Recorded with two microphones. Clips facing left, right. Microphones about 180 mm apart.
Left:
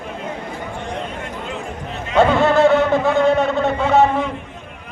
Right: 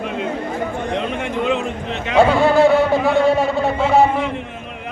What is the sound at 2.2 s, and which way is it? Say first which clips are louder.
A man's voice: right 1 dB; 5° right (ahead or behind).